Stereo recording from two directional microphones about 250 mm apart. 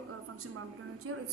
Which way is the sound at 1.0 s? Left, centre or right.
Right.